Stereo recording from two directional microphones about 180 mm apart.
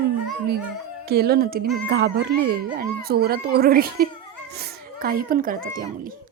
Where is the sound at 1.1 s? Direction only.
60° right (ahead or behind).